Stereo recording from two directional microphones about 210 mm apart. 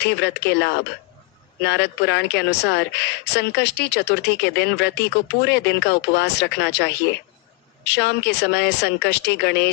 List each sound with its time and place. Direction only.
0.0 s speech: 55° left (ahead or behind)